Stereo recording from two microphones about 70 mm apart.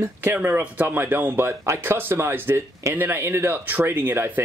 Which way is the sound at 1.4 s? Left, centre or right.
Right.